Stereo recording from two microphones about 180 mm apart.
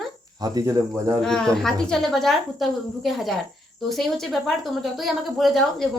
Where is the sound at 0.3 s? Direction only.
20° right (ahead or behind).